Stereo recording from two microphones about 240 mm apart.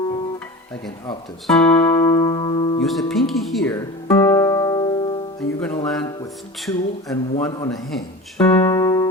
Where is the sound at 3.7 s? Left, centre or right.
Centre.